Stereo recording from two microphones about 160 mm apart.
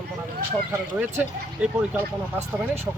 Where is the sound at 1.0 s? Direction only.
10° right (ahead or behind).